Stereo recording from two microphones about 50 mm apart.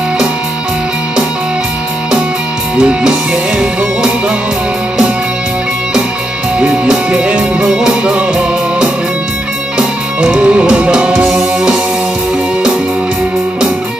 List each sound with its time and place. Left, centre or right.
2.8 s music: centre
6.7 s music: centre
11.2 s music: centre